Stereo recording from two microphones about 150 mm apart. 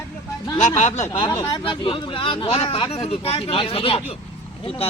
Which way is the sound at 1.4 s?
30° left (ahead or behind).